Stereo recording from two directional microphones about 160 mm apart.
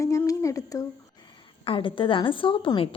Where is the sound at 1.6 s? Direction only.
35° left (ahead or behind).